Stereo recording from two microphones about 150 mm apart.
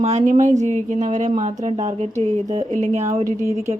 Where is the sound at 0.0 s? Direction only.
50° right (ahead or behind).